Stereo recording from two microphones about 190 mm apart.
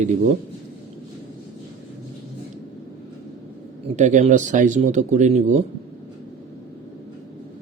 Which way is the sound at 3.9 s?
40° right (ahead or behind).